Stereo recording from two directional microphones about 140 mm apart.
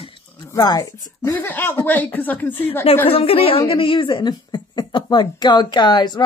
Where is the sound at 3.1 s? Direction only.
45° left (ahead or behind).